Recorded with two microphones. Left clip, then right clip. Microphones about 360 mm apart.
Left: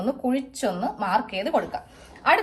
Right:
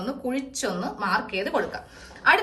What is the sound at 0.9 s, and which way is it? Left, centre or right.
Speech, centre.